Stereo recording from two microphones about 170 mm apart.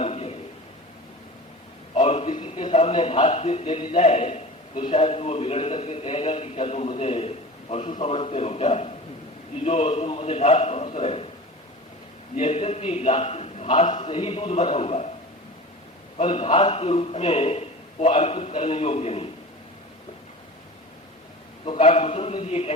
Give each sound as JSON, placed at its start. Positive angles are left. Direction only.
{"t": 0.0, "sound": "a sound", "side_deg": 35}
{"t": 2.0, "sound": "a man's voice", "side_deg": 35}
{"t": 12.4, "sound": "a man's voice", "side_deg": 35}
{"t": 16.1, "sound": "a man's voice", "side_deg": 30}
{"t": 21.6, "sound": "a man's voice", "side_deg": 30}